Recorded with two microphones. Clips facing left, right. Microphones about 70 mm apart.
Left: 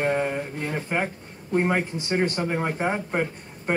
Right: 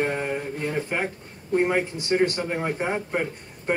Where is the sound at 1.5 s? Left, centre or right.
Centre.